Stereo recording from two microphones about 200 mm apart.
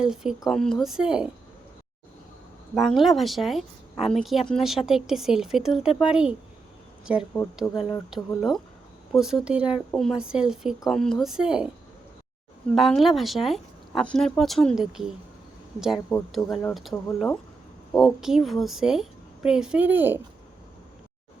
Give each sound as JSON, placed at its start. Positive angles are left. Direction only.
{"t": 0.0, "sound": "speech", "side_deg": -5}
{"t": 2.7, "sound": "speech", "side_deg": 0}
{"t": 7.8, "sound": "speech", "side_deg": 20}
{"t": 8.1, "sound": "speech", "side_deg": 0}
{"t": 12.7, "sound": "speech", "side_deg": 0}